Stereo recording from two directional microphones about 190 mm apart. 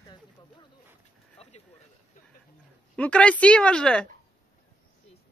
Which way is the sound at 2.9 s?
5° left (ahead or behind).